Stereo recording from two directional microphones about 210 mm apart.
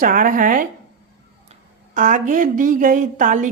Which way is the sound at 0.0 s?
40° right (ahead or behind).